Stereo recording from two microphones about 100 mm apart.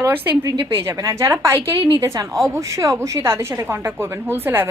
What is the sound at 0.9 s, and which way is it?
A woman's voice, 30° right (ahead or behind).